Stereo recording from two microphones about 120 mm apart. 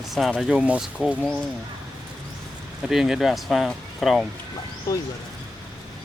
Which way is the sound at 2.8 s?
5° right (ahead or behind).